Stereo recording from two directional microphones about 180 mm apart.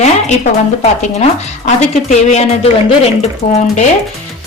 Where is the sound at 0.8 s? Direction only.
40° left (ahead or behind).